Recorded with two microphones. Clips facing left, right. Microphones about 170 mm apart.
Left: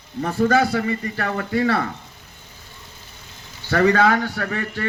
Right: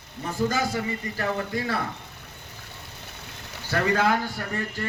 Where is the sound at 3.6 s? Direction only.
75° left (ahead or behind).